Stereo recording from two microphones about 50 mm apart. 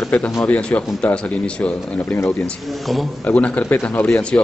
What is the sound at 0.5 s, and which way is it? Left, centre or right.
Speech, left.